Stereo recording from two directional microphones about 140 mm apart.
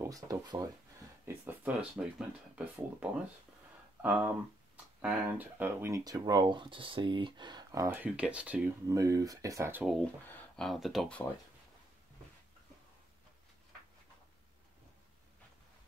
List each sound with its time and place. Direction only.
0.0 s speech: 25° right (ahead or behind)
8.0 s speech: 10° right (ahead or behind)
8.8 s speech: 25° right (ahead or behind)
10.0 s speech: 10° left (ahead or behind)